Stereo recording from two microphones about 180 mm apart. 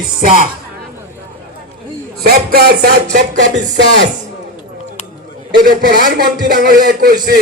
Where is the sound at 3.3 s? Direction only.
40° right (ahead or behind).